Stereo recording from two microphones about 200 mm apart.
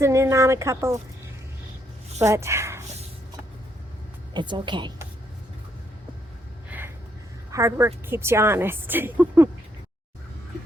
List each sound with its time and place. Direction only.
0.0 s a woman's voice: 15° right (ahead or behind)
2.2 s speech: 15° right (ahead or behind)
4.4 s a woman's voice: 25° right (ahead or behind)
6.7 s a sound: 10° right (ahead or behind)
7.5 s a woman's voice: 15° right (ahead or behind)